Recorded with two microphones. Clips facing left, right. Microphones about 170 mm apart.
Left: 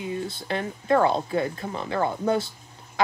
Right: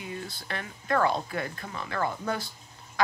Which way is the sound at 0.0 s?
25° left (ahead or behind).